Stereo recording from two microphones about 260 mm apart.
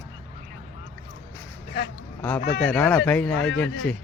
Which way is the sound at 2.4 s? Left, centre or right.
Left.